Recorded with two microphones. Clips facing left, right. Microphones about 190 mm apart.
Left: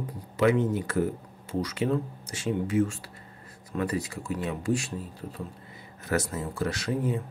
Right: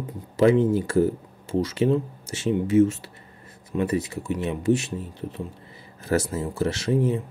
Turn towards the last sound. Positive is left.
turn(degrees=-25)  # may be behind; listen again after turning